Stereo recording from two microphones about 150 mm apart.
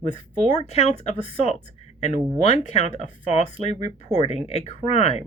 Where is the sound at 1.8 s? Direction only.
50° left (ahead or behind).